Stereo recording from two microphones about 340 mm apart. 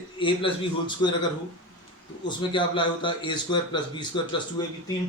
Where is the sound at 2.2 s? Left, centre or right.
Centre.